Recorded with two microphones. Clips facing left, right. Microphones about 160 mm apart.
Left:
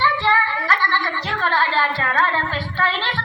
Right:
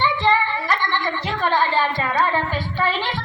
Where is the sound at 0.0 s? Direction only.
15° right (ahead or behind).